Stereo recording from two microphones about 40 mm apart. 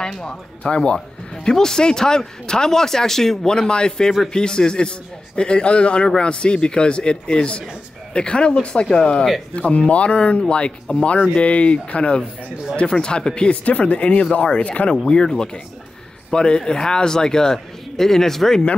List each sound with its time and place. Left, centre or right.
0.2 s a man's voice: left
13.7 s speech: left
15.0 s a man's voice: centre